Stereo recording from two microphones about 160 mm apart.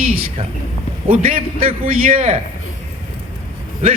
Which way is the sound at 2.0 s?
55° right (ahead or behind).